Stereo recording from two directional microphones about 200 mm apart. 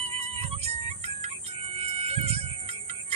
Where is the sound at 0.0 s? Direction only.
30° right (ahead or behind).